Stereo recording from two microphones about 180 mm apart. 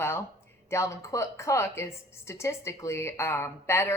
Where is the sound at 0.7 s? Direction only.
15° left (ahead or behind).